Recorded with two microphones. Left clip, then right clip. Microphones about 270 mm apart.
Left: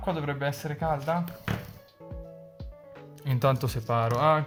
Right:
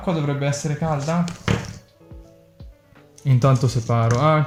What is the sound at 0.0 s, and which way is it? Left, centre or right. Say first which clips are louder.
Speech: right 6 dB; left.